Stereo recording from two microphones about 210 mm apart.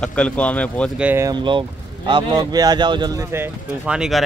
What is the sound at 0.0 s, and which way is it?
Speech, 5° left (ahead or behind).